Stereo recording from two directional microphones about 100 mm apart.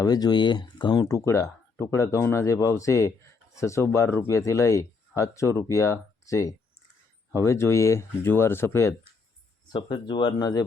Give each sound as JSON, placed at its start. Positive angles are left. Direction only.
{"t": 0.0, "sound": "speech", "side_deg": 40}
{"t": 1.0, "sound": "speech", "side_deg": 30}
{"t": 9.7, "sound": "speech", "side_deg": 55}